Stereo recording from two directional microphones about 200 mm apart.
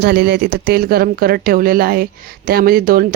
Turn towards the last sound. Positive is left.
turn(degrees=-45)  # may be behind; listen again after turning